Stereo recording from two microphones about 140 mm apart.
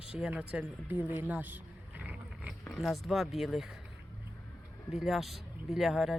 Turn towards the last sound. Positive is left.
turn(degrees=0)  # may be behind; listen again after turning